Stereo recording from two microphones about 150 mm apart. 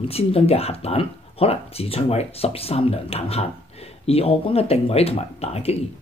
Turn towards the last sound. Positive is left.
turn(degrees=45)  # may be behind; listen again after turning